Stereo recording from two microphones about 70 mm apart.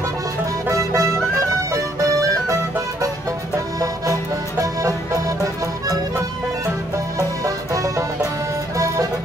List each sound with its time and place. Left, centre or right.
0.7 s music: right
3.8 s music: right
7.2 s music: right